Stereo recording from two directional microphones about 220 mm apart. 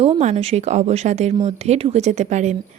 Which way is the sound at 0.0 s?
30° right (ahead or behind).